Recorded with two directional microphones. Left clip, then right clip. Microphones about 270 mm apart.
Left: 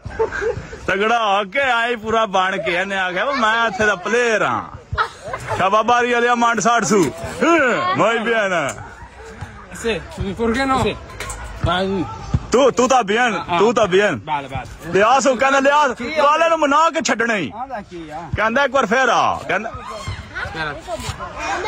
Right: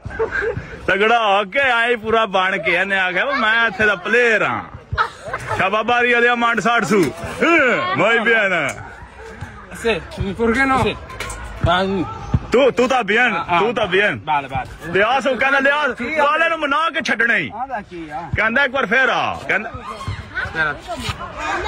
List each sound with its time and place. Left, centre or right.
0.3 s a man's voice: centre
9.8 s speech: centre
13.7 s a man's voice: centre
14.2 s speech: centre
14.9 s a man's voice: centre
20.9 s speech: left